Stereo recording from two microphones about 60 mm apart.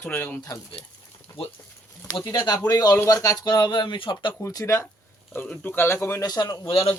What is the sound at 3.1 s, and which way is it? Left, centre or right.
Speech, left.